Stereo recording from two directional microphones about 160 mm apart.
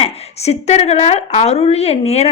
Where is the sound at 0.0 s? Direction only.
40° left (ahead or behind).